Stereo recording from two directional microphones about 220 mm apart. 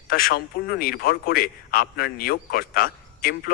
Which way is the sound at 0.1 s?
40° left (ahead or behind).